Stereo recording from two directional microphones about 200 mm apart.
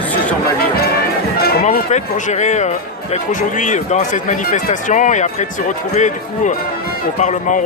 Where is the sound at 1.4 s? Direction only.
45° left (ahead or behind).